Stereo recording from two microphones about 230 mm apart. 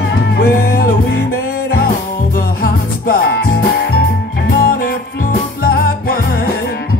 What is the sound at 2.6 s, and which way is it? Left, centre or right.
Music, left.